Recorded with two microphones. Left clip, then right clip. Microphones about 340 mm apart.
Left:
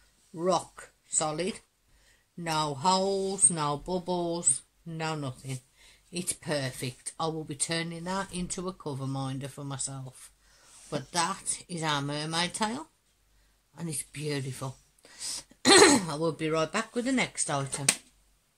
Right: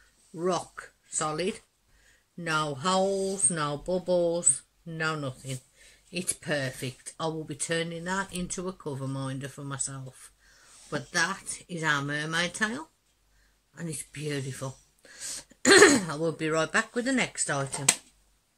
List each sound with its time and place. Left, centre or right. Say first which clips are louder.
0.4 s speech: left 2 dB; centre